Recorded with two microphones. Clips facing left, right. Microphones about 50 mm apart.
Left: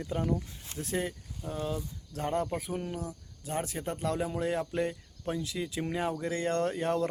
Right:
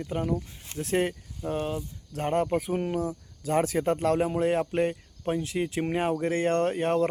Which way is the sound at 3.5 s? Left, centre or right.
Right.